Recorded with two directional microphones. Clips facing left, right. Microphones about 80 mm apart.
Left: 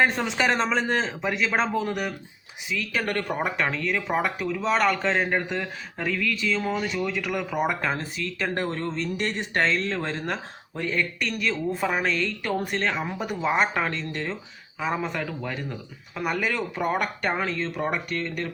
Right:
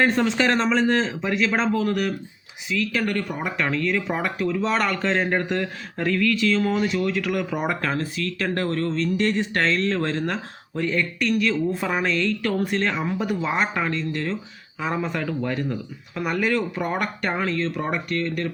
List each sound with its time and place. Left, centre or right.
0.0 s speech: centre
3.1 s speech: left
3.6 s speech: centre
7.9 s speech: centre
12.0 s speech: centre
13.7 s speech: left
14.8 s speech: centre
18.1 s speech: centre